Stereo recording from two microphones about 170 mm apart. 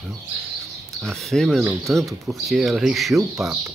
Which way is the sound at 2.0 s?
Centre (ahead or behind).